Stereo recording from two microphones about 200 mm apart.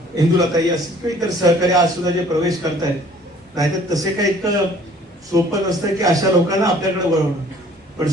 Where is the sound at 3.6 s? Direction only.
15° right (ahead or behind).